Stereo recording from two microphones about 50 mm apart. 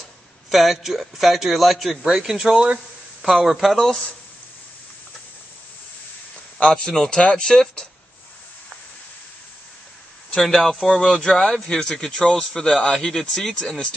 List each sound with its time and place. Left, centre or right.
0.5 s a man's voice: centre
2.5 s speech: centre
3.2 s a man's voice: centre
6.6 s a man's voice: centre
10.4 s a man's voice: centre